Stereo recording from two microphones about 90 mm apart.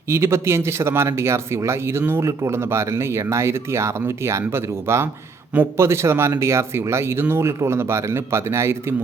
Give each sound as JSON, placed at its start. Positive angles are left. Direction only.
{"t": 0.1, "sound": "speech", "side_deg": -30}